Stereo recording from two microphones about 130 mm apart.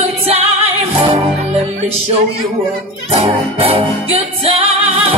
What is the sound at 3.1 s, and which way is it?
Music, 50° right (ahead or behind).